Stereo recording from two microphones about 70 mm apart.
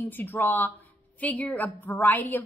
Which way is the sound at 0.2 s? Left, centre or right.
Left.